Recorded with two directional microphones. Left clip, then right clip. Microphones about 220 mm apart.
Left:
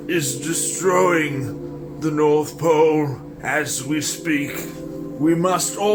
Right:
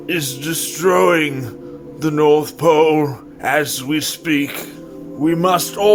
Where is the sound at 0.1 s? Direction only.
40° right (ahead or behind).